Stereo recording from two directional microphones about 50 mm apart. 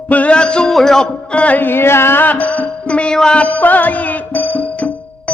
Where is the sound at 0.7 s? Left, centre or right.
Centre.